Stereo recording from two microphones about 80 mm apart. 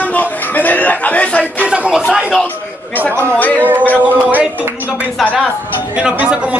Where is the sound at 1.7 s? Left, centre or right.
Centre.